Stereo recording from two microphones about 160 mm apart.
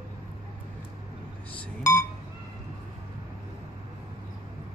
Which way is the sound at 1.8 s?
20° left (ahead or behind).